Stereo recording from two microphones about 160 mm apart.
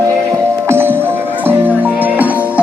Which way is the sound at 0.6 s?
15° right (ahead or behind).